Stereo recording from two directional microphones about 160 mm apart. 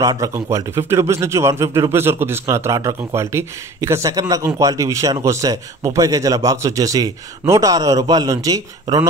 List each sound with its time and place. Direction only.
0.0 s a man's voice: 20° right (ahead or behind)